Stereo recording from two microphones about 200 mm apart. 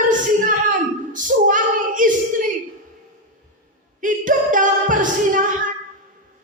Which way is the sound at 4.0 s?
40° right (ahead or behind).